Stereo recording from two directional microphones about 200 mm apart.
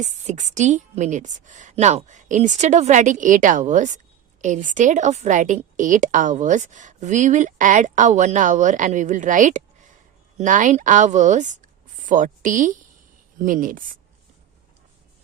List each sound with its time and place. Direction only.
0.0 s a woman's voice: 35° right (ahead or behind)